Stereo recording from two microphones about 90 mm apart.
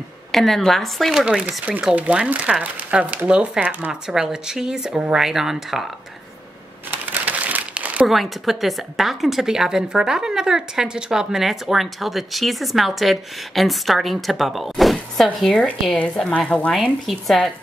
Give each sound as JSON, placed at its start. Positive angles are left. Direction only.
{"t": 0.3, "sound": "a woman's voice", "side_deg": 5}
{"t": 6.9, "sound": "crumpling", "side_deg": -20}
{"t": 8.1, "sound": "a woman's voice", "side_deg": 0}
{"t": 16.7, "sound": "a woman's voice", "side_deg": 0}